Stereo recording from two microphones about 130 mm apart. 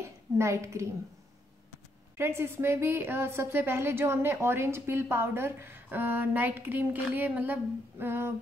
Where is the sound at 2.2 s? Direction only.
20° right (ahead or behind).